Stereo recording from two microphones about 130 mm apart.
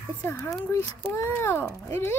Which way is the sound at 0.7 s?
20° left (ahead or behind).